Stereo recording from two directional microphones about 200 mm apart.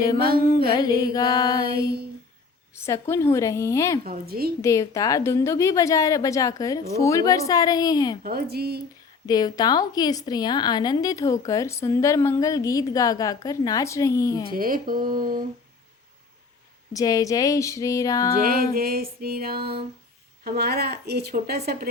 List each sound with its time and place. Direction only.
0.2 s music: 45° right (ahead or behind)
0.8 s a woman's voice: 15° left (ahead or behind)
2.7 s a woman's voice: 15° left (ahead or behind)
4.0 s music: 50° right (ahead or behind)
4.6 s a woman's voice: 15° left (ahead or behind)
8.2 s music: 50° right (ahead or behind)
9.2 s a woman's voice: 20° left (ahead or behind)
14.5 s music: 45° right (ahead or behind)
16.9 s a woman's voice: 15° left (ahead or behind)
18.3 s music: 45° right (ahead or behind)